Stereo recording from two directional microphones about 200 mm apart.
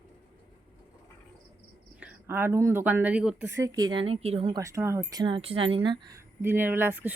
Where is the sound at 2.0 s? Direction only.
10° right (ahead or behind).